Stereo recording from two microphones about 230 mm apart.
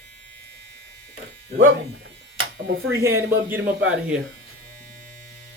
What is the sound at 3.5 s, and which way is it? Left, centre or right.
Speech, centre.